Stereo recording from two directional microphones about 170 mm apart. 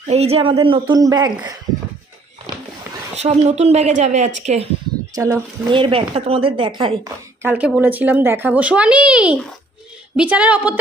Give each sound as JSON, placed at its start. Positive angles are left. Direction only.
{"t": 0.1, "sound": "speech", "side_deg": -35}
{"t": 3.2, "sound": "speech", "side_deg": -40}
{"t": 5.1, "sound": "speech", "side_deg": -20}
{"t": 5.8, "sound": "speech", "side_deg": -35}
{"t": 7.4, "sound": "a child's voice", "side_deg": -5}